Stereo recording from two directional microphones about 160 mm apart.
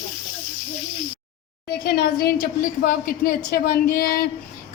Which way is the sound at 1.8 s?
75° left (ahead or behind).